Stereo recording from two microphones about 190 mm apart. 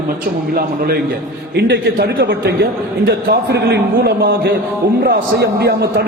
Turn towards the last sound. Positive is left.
turn(degrees=-60)  # may be behind; listen again after turning